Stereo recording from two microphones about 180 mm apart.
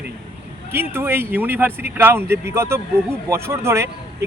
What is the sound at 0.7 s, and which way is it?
Speech, 15° right (ahead or behind).